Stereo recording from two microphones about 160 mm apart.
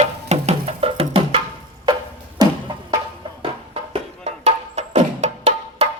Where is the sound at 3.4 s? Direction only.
35° right (ahead or behind).